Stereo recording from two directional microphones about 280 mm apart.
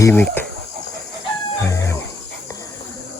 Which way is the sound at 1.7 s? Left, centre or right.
Centre.